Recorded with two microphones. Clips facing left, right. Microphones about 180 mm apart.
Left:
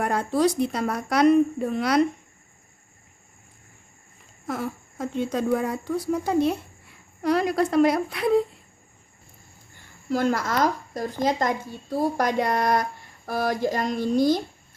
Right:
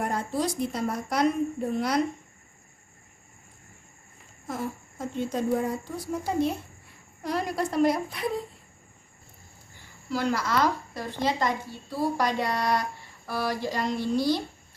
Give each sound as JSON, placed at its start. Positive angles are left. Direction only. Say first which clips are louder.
{"t": 0.0, "sound": "speech", "louder": "left 6 dB", "side_deg": 75}
{"t": 4.4, "sound": "speech", "louder": "left 3 dB", "side_deg": 80}
{"t": 10.1, "sound": "speech", "louder": "left 3 dB", "side_deg": 50}